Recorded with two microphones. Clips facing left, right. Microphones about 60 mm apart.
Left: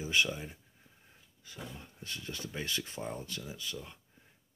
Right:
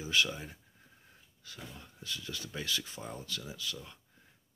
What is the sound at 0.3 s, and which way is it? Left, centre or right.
Speech, centre.